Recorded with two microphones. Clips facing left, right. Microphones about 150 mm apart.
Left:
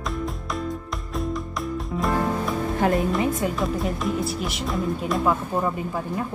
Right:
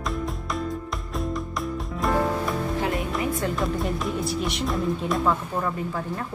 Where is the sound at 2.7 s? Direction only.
50° left (ahead or behind).